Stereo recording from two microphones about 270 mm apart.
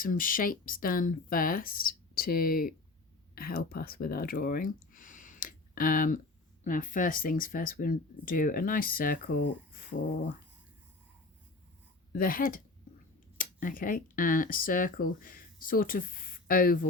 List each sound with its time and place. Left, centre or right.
0.0 s speech: left
12.1 s speech: left